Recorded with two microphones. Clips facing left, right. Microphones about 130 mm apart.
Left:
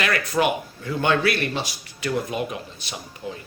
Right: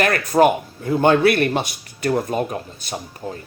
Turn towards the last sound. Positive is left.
turn(degrees=-45)  # may be behind; listen again after turning